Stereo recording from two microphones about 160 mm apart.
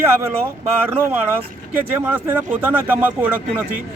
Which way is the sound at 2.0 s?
10° right (ahead or behind).